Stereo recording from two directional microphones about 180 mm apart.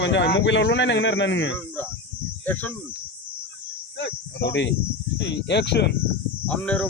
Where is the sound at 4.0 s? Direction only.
75° left (ahead or behind).